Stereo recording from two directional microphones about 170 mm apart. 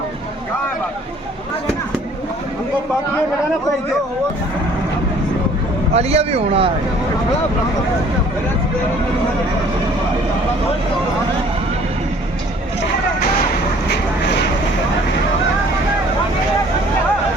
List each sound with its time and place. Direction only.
5.9 s speech: 40° right (ahead or behind)